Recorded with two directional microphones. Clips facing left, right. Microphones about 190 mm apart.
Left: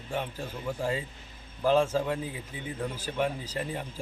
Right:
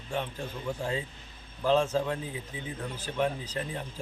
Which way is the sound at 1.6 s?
10° left (ahead or behind).